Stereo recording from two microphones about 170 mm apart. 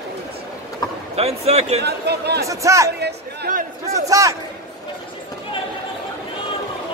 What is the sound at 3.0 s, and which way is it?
Chatter, 75° right (ahead or behind).